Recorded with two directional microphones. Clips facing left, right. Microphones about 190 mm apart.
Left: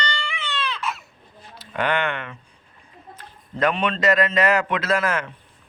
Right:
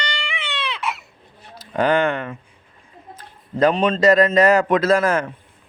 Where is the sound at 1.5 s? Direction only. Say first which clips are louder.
Right 6 dB; 40° right (ahead or behind).